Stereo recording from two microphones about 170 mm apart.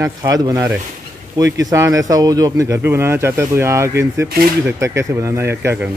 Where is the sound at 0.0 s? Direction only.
20° right (ahead or behind).